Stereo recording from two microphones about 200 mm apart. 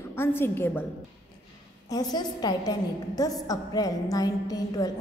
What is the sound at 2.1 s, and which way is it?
A woman's voice, 20° left (ahead or behind).